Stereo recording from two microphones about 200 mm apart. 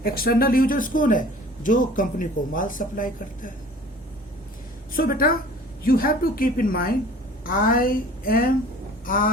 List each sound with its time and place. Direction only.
0.0 s speech: 50° left (ahead or behind)
4.9 s speech: 45° left (ahead or behind)